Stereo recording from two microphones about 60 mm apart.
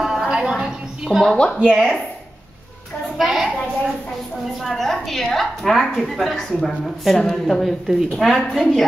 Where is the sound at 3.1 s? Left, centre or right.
Centre.